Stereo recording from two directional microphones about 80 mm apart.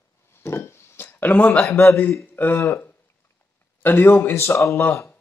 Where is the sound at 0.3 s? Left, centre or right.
Left.